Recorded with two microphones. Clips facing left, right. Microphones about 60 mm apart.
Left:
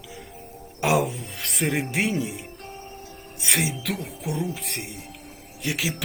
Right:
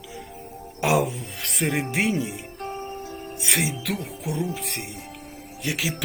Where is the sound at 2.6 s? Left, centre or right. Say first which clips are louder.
Right 7 dB; right.